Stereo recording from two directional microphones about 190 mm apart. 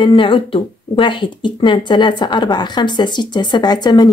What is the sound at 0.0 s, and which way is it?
Speech, 25° left (ahead or behind).